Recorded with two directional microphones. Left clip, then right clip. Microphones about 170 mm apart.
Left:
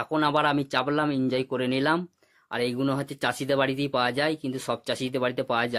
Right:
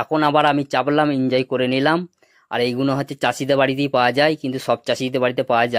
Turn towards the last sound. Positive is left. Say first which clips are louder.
# right 8 dB
turn(degrees=-25)  # may be behind; listen again after turning